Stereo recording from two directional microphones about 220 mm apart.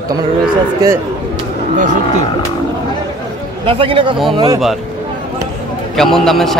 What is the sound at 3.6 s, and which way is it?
A man's voice, 25° right (ahead or behind).